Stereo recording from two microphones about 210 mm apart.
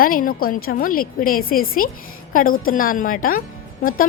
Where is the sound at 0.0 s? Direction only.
40° left (ahead or behind).